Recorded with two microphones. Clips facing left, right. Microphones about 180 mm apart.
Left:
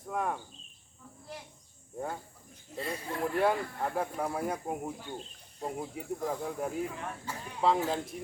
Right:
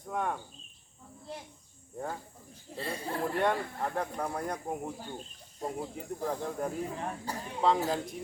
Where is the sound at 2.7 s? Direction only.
30° right (ahead or behind).